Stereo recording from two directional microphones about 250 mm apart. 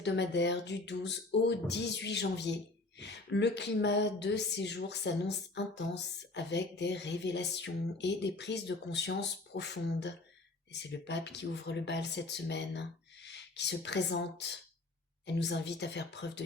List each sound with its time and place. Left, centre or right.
0.0 s a woman's voice: left